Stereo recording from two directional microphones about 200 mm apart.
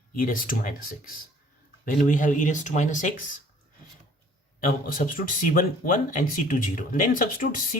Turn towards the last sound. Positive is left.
turn(degrees=45)  # may be behind; listen again after turning